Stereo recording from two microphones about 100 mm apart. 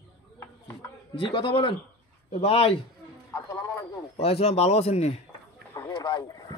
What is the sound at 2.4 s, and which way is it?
Speech, 75° left (ahead or behind).